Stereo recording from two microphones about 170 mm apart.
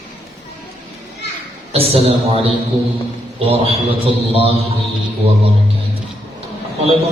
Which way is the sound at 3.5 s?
35° right (ahead or behind).